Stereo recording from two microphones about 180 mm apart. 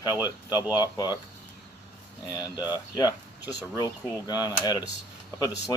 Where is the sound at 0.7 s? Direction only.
20° left (ahead or behind).